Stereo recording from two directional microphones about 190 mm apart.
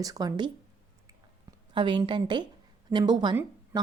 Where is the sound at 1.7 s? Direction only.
25° right (ahead or behind).